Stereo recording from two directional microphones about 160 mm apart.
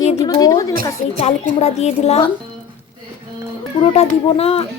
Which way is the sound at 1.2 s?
45° left (ahead or behind).